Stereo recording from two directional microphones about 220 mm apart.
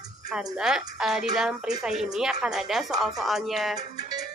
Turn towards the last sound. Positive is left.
turn(degrees=-15)  # may be behind; listen again after turning